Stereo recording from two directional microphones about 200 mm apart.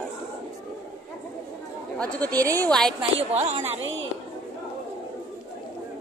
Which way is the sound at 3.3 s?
30° right (ahead or behind).